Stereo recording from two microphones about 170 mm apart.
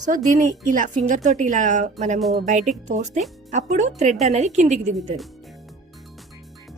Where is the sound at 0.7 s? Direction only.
50° right (ahead or behind).